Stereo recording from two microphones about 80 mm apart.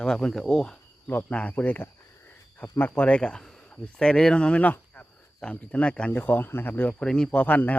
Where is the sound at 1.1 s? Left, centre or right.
Left.